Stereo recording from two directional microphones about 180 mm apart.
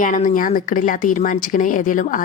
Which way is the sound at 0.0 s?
45° left (ahead or behind).